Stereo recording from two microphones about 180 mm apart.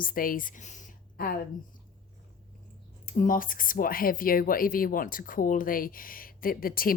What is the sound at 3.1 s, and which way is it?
Speech, 50° left (ahead or behind).